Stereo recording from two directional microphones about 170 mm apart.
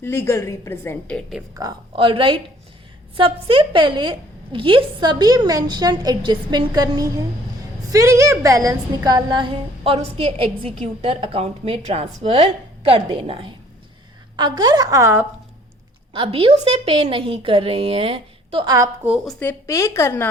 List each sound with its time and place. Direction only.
0.0 s a woman's voice: 15° left (ahead or behind)
1.5 s a woman's voice: 25° right (ahead or behind)
16.1 s a woman's voice: 35° right (ahead or behind)
19.0 s speech: centre (ahead or behind)
19.4 s a woman's voice: 15° left (ahead or behind)